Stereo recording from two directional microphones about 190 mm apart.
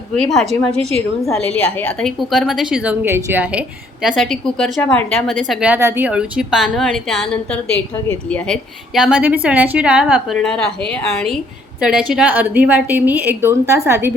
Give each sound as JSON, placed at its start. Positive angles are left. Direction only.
{"t": 0.1, "sound": "a woman's voice", "side_deg": 0}
{"t": 0.8, "sound": "a woman's voice", "side_deg": -35}
{"t": 1.5, "sound": "a woman's voice", "side_deg": 5}
{"t": 9.0, "sound": "a woman's voice", "side_deg": -5}